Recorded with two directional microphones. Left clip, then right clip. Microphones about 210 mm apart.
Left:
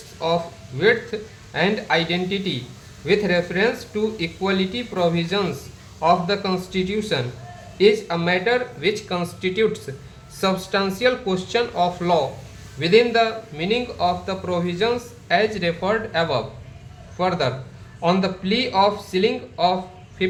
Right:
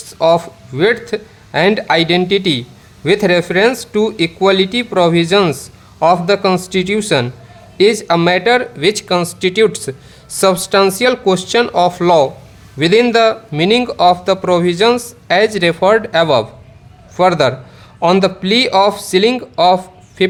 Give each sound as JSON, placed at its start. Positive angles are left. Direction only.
{"t": 0.2, "sound": "speech", "side_deg": -50}